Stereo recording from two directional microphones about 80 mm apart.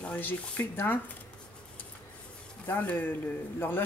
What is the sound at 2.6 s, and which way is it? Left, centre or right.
Speech, left.